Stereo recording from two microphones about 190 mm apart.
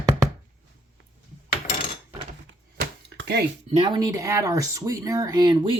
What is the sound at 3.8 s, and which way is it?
Speech, 20° right (ahead or behind).